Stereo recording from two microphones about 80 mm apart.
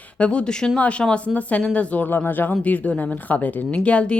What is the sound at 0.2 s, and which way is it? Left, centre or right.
A woman's voice, centre.